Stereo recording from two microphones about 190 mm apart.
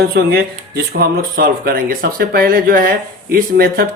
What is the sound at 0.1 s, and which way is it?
Speech, 60° right (ahead or behind).